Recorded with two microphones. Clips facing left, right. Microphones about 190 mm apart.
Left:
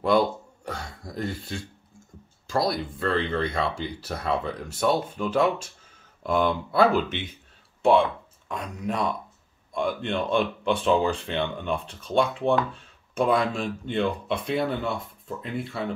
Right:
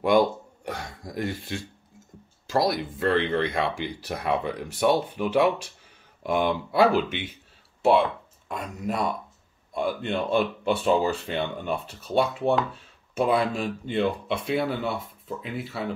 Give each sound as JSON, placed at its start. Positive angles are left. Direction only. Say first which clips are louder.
{"t": 0.0, "sound": "speech", "louder": "right 1 dB", "side_deg": -15}
{"t": 0.7, "sound": "throat clearing", "louder": "right 1 dB", "side_deg": -15}
{"t": 2.5, "sound": "speech", "louder": "right 1 dB", "side_deg": -15}